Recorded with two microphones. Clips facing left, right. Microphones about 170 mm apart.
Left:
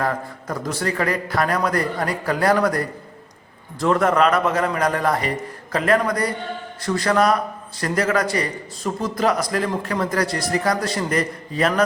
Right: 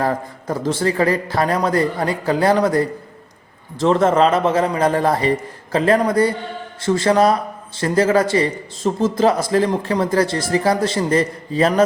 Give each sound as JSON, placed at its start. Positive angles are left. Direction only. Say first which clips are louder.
{"t": 0.0, "sound": "a man's voice", "louder": "right 3 dB", "side_deg": -30}